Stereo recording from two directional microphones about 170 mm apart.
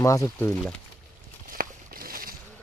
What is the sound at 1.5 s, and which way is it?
Walk, 60° right (ahead or behind).